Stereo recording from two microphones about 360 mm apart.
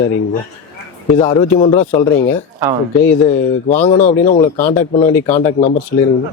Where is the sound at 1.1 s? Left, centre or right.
Centre.